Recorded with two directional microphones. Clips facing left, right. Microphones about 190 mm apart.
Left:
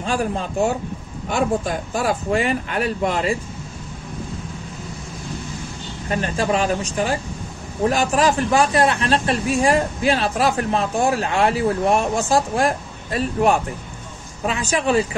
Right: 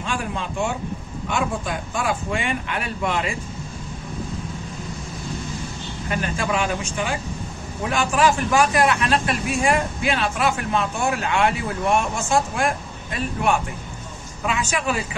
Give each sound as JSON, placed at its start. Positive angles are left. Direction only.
{"t": 0.0, "sound": "speech", "side_deg": 40}
{"t": 6.0, "sound": "speech", "side_deg": 30}